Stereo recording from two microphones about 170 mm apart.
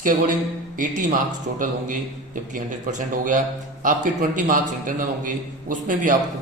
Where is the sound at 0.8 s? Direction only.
50° right (ahead or behind).